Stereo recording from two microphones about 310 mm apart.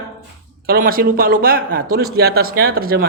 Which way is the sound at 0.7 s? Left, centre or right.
Right.